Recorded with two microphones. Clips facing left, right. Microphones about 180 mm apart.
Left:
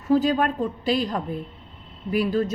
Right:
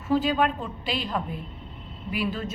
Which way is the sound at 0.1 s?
40° left (ahead or behind).